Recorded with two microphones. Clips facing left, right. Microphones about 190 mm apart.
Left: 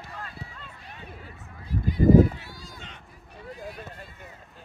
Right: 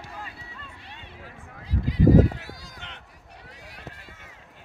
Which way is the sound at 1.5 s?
90° right.